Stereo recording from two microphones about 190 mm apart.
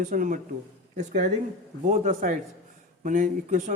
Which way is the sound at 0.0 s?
45° right (ahead or behind).